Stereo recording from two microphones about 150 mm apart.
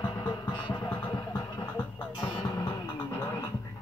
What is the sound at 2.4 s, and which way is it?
Music, 30° left (ahead or behind).